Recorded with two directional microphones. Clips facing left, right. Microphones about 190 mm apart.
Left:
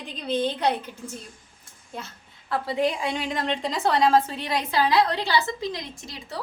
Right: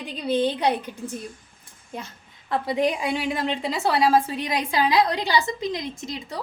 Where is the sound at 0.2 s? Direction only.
10° right (ahead or behind).